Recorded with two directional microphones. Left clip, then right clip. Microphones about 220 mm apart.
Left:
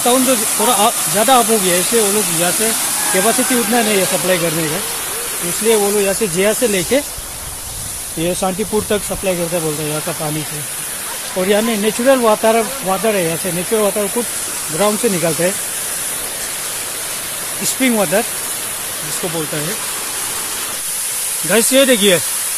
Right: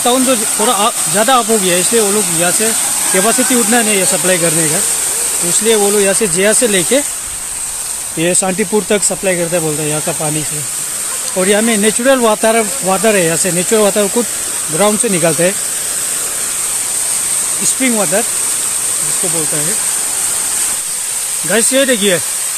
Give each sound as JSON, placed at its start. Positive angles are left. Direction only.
{"t": 0.6, "sound": "speech", "side_deg": -20}
{"t": 2.0, "sound": "speech", "side_deg": -15}
{"t": 3.7, "sound": "speech", "side_deg": -30}
{"t": 5.7, "sound": "speech", "side_deg": -25}
{"t": 8.2, "sound": "speech", "side_deg": -35}
{"t": 11.3, "sound": "speech", "side_deg": -30}
{"t": 14.8, "sound": "speech", "side_deg": -30}
{"t": 17.6, "sound": "speech", "side_deg": 0}
{"t": 21.5, "sound": "speech", "side_deg": -5}